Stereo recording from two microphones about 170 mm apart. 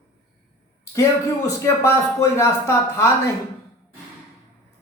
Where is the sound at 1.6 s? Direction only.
15° left (ahead or behind).